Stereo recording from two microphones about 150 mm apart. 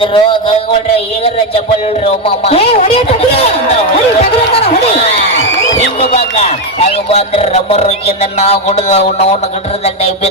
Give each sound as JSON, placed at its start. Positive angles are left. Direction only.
{"t": 0.0, "sound": "a man's voice", "side_deg": 35}
{"t": 2.0, "sound": "a man's voice", "side_deg": 45}
{"t": 6.3, "sound": "speech", "side_deg": 45}